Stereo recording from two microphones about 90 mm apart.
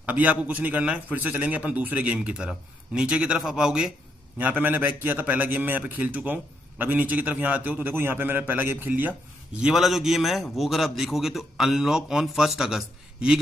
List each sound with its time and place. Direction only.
0.0 s a man's voice: 15° right (ahead or behind)
4.4 s a man's voice: 20° right (ahead or behind)
9.6 s a man's voice: 5° right (ahead or behind)